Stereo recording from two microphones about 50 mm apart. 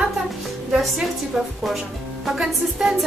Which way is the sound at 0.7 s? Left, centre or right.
Centre.